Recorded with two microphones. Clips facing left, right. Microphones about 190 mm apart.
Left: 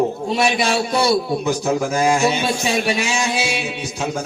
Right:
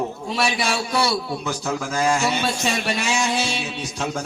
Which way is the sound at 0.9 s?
20° left (ahead or behind).